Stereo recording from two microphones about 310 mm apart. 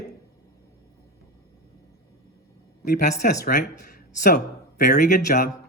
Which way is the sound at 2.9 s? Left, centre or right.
Left.